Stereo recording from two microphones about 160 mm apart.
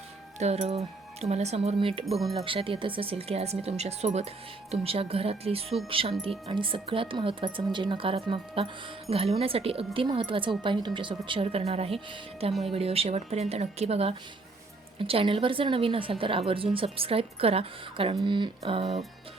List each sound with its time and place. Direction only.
0.3 s speech: 45° right (ahead or behind)
2.0 s speech: centre (ahead or behind)
2.3 s a woman's voice: 35° right (ahead or behind)